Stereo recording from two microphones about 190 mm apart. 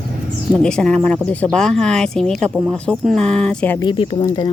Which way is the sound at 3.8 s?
25° left (ahead or behind).